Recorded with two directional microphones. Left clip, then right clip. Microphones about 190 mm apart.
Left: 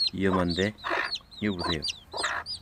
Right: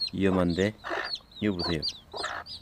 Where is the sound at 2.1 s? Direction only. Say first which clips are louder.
Left 7 dB; 45° left (ahead or behind).